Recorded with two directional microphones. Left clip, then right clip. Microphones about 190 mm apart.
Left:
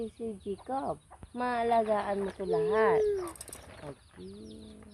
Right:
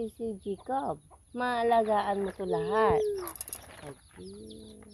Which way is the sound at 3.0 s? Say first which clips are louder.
Left 2 dB; 40° right (ahead or behind).